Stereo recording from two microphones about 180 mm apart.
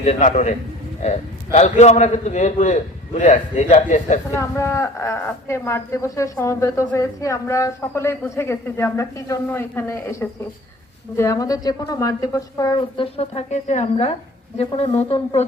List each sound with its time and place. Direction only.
0.0 s a man's voice: 40° left (ahead or behind)
1.5 s a man's voice: 40° left (ahead or behind)
4.3 s a woman's voice: 15° left (ahead or behind); by 15.4 s 30° left (ahead or behind)